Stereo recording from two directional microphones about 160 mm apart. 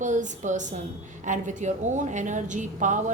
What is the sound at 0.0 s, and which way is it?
A woman's voice, 50° right (ahead or behind).